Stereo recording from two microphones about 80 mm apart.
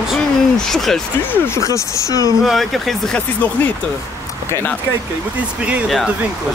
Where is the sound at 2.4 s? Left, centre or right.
Centre.